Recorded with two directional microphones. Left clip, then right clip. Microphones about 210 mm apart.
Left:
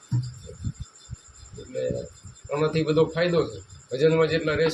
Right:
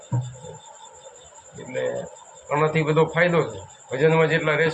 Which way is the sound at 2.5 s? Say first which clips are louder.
Right 3 dB; 20° left (ahead or behind).